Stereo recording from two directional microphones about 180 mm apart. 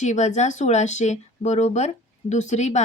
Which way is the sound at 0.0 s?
40° left (ahead or behind).